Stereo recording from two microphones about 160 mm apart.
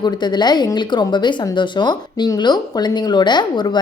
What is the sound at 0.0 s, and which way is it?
Speech, 25° left (ahead or behind).